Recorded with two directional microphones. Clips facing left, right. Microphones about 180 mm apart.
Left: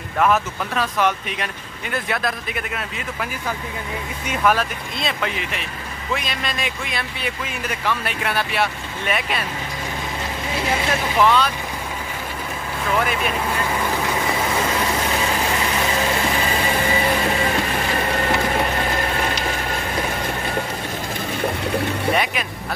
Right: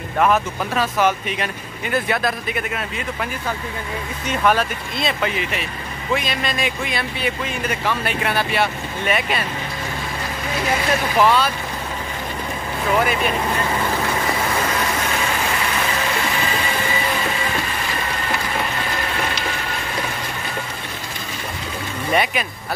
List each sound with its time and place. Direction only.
0.2 s speech: 5° right (ahead or behind)
10.9 s speech: 5° right (ahead or behind)
12.8 s speech: 5° right (ahead or behind)
22.1 s speech: centre (ahead or behind)